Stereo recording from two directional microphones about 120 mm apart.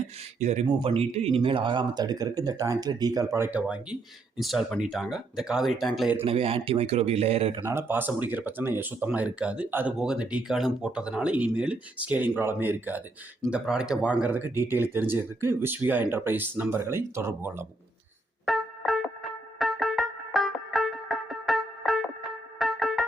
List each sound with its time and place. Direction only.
0.3 s speech: 70° right (ahead or behind)
0.7 s speech: 50° right (ahead or behind); by 3.2 s 30° right (ahead or behind)
3.3 s speech: 20° right (ahead or behind)
4.4 s speech: centre (ahead or behind)
6.2 s speech: 55° right (ahead or behind)
7.6 s speech: 20° right (ahead or behind)
18.4 s music: centre (ahead or behind)